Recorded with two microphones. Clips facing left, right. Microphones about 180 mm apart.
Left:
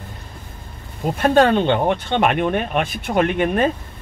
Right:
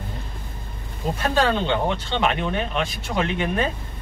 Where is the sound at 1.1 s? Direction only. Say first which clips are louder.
Left 7 dB; 55° left (ahead or behind).